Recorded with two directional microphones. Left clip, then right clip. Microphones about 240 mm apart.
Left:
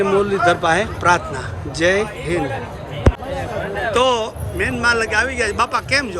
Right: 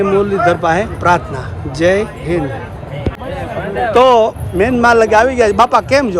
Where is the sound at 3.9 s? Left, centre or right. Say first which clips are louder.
Right 9 dB; centre.